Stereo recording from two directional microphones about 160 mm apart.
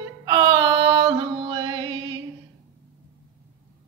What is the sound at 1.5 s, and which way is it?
Mantra, 30° right (ahead or behind).